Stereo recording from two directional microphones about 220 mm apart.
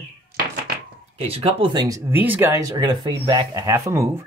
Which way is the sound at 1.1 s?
25° right (ahead or behind).